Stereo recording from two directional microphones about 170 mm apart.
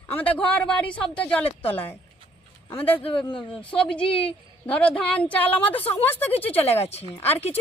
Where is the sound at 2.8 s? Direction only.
10° left (ahead or behind).